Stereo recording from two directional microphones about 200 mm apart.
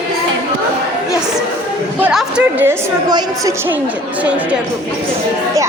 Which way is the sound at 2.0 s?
10° right (ahead or behind).